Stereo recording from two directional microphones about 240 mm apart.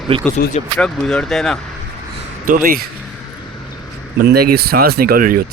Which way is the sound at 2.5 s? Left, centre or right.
Right.